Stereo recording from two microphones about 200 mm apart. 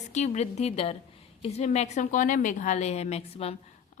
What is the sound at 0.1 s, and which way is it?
Speech, 35° left (ahead or behind).